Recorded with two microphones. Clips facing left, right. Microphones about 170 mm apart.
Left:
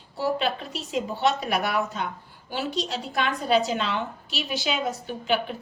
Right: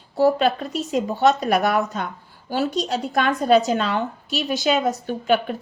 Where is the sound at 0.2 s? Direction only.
45° right (ahead or behind).